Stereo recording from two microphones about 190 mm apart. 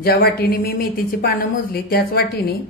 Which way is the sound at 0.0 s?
55° left (ahead or behind).